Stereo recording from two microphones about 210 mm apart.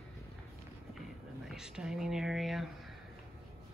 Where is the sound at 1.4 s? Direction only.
5° right (ahead or behind).